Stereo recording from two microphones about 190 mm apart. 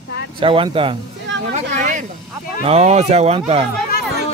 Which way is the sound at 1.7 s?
40° right (ahead or behind).